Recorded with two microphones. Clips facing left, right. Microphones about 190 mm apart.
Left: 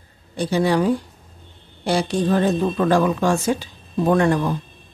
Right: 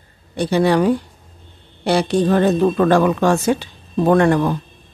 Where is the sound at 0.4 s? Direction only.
65° right (ahead or behind).